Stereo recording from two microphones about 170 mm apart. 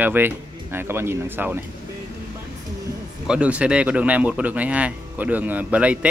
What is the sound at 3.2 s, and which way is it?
Speech, 5° right (ahead or behind).